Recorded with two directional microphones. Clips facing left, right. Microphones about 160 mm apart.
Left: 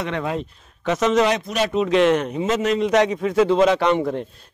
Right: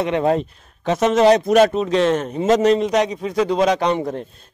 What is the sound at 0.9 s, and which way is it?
A man's voice, 50° right (ahead or behind).